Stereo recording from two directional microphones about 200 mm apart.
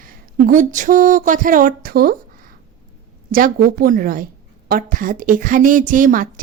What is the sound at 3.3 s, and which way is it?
A woman's voice, 45° right (ahead or behind).